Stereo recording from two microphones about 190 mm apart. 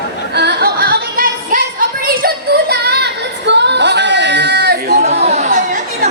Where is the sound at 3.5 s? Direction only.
65° right (ahead or behind).